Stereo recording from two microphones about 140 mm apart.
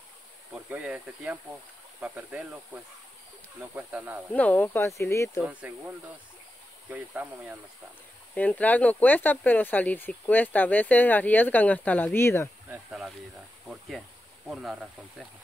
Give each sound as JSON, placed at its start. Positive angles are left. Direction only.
{"t": 0.7, "sound": "speech", "side_deg": -10}
{"t": 4.3, "sound": "speech", "side_deg": 10}
{"t": 5.4, "sound": "speech", "side_deg": -10}
{"t": 8.4, "sound": "speech", "side_deg": 10}
{"t": 14.5, "sound": "speech", "side_deg": -5}